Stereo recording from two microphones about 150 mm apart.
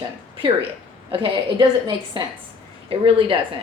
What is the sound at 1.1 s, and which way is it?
A woman's voice, 35° right (ahead or behind).